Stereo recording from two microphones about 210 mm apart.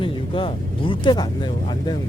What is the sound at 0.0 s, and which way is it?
Speech, 25° left (ahead or behind).